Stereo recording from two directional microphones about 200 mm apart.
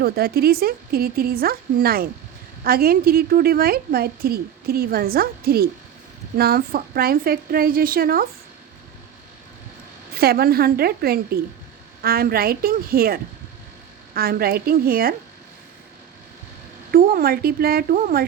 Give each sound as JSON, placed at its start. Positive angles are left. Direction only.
{"t": 0.0, "sound": "a woman's voice", "side_deg": -50}
{"t": 10.2, "sound": "a woman's voice", "side_deg": -50}
{"t": 16.9, "sound": "a woman's voice", "side_deg": -50}